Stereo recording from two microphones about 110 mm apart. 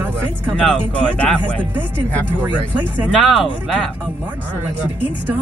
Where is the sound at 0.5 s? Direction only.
5° left (ahead or behind).